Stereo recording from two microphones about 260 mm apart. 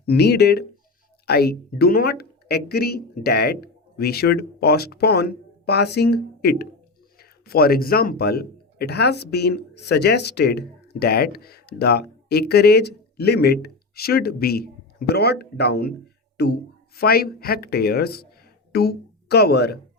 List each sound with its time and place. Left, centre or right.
0.0 s speech: left